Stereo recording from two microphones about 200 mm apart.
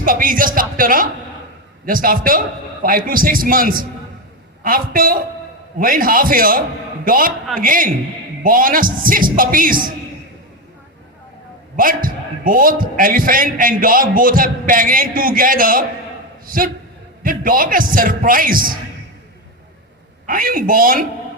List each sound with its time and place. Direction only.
0.0 s a man's voice: 45° right (ahead or behind)
11.8 s a man's voice: 45° right (ahead or behind)
17.2 s a man's voice: 45° right (ahead or behind)
20.2 s a man's voice: 45° right (ahead or behind)